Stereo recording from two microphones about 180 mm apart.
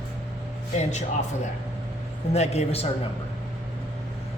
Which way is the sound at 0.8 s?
40° left (ahead or behind).